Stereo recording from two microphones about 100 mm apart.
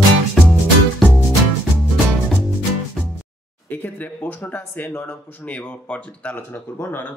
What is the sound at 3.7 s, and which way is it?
Speech, 15° left (ahead or behind).